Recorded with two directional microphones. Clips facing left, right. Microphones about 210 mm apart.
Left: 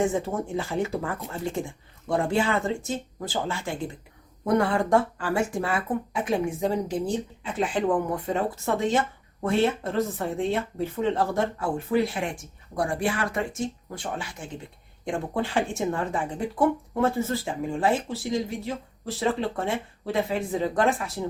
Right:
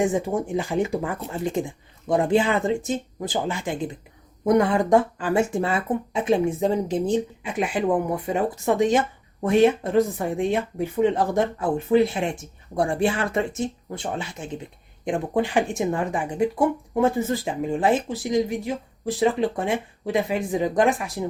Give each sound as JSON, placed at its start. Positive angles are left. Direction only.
{"t": 0.0, "sound": "speech", "side_deg": -15}